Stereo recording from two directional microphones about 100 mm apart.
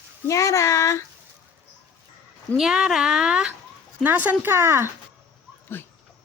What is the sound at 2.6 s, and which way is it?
Speech, 5° right (ahead or behind).